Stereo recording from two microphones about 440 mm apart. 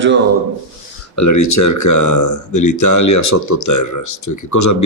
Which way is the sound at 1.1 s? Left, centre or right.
Left.